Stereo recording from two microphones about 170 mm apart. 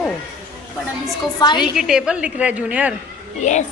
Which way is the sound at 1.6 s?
5° right (ahead or behind).